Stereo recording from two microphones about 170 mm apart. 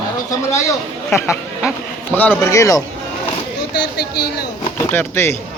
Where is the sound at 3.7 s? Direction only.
70° left (ahead or behind).